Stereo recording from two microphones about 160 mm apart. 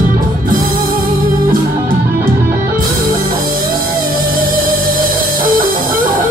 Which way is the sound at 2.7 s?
60° right (ahead or behind).